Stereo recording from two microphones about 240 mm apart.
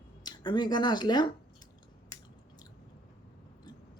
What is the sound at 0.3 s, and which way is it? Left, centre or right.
Speech, centre.